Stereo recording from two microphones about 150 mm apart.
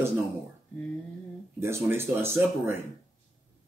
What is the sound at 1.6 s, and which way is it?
A man's voice, 15° right (ahead or behind).